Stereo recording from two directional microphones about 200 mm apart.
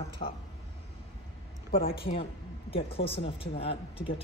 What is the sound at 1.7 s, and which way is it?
Speech, 45° left (ahead or behind).